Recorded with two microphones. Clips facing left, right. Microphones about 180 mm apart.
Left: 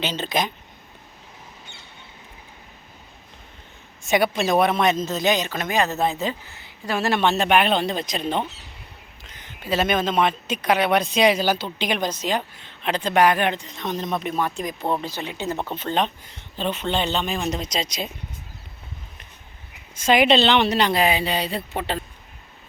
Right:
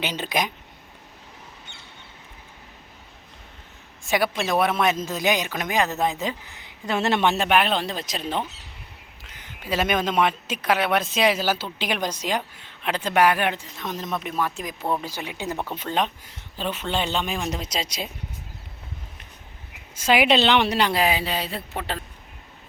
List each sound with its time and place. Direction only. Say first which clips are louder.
0.0 s speech: left 1 dB; 15° right (ahead or behind)
4.0 s speech: left 3 dB; centre (ahead or behind); by 7.4 s 15° right (ahead or behind)
7.4 s a woman's voice: left 2 dB; centre (ahead or behind)
20.0 s a woman's voice: left 2 dB; 5° right (ahead or behind)